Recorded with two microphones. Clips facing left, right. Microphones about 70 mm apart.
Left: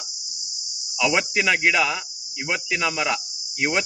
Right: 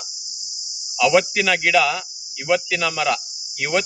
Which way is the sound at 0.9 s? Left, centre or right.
Centre.